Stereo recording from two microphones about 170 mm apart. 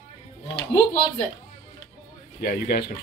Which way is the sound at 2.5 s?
65° left (ahead or behind).